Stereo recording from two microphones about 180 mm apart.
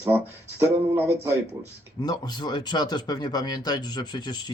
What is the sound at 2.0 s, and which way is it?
Speech, 25° left (ahead or behind).